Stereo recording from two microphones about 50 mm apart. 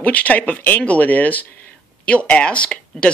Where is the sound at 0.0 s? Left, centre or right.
Left.